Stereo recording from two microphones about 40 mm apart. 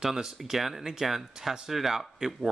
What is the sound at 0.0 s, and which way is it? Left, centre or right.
Speech, centre.